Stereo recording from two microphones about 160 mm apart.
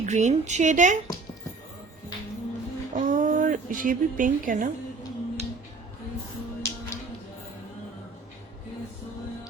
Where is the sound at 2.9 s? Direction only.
55° right (ahead or behind).